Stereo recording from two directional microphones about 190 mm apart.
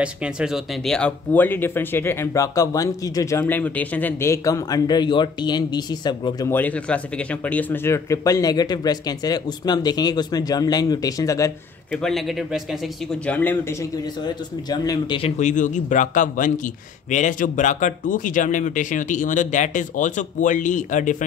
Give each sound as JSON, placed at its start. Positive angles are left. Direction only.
{"t": 0.0, "sound": "speech", "side_deg": -5}
{"t": 6.5, "sound": "speech", "side_deg": 10}
{"t": 11.9, "sound": "a man's voice", "side_deg": 0}
{"t": 13.3, "sound": "speech", "side_deg": 10}
{"t": 14.2, "sound": "speech", "side_deg": 20}